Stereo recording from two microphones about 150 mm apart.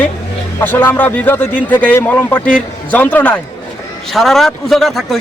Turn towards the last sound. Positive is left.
turn(degrees=0)  # may be behind; listen again after turning